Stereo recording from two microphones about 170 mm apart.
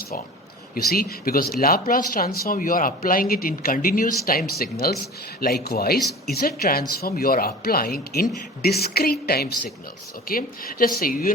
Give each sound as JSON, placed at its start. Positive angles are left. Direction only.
{"t": 0.9, "sound": "speech", "side_deg": 60}